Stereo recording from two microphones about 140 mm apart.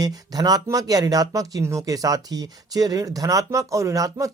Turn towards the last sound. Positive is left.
turn(degrees=-25)  # may be behind; listen again after turning